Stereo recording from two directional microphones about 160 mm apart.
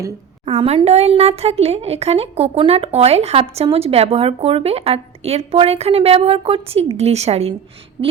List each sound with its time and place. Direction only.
0.4 s a woman's voice: 40° right (ahead or behind)